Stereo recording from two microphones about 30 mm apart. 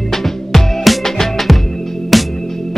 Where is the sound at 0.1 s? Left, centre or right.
Centre.